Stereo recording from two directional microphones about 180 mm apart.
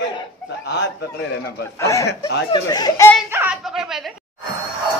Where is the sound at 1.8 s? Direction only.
15° left (ahead or behind).